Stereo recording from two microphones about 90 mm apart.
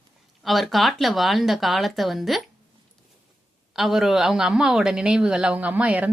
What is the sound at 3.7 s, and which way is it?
Speech, centre (ahead or behind).